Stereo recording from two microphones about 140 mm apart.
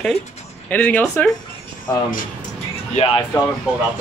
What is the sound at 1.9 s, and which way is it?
Speech, 20° left (ahead or behind).